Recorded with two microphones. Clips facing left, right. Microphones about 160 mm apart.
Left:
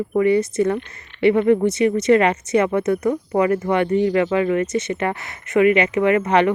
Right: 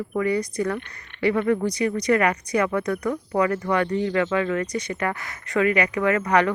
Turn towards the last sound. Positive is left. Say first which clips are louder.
# left 4 dB
turn(degrees=25)  # may be behind; listen again after turning